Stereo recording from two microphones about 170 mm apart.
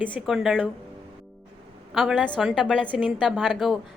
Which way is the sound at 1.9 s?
Centre (ahead or behind).